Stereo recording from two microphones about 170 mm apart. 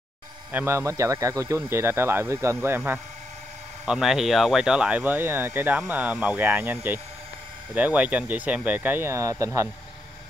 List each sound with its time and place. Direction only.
0.5 s speech: 10° right (ahead or behind)